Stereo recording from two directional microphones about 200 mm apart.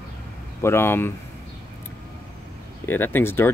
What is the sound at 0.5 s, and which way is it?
Speech, 10° left (ahead or behind).